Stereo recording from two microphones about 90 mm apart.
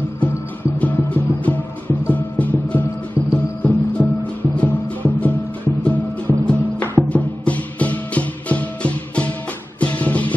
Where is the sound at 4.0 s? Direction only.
25° left (ahead or behind).